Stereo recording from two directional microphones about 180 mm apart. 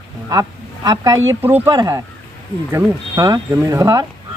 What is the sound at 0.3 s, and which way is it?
A woman's voice, 20° right (ahead or behind).